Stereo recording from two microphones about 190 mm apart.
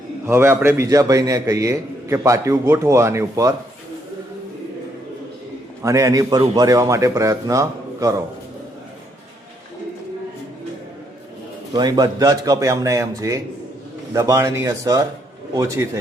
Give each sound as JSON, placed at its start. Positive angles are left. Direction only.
{"t": 0.3, "sound": "a man's voice", "side_deg": -10}
{"t": 5.8, "sound": "a man's voice", "side_deg": -15}
{"t": 11.7, "sound": "a man's voice", "side_deg": -20}